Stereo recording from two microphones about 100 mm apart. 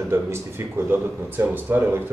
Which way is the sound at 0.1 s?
25° right (ahead or behind).